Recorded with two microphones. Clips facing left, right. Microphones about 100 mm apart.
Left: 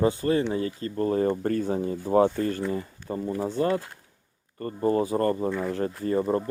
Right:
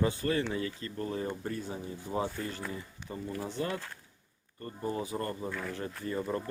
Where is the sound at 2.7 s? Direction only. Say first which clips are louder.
Left 10 dB; 45° left (ahead or behind).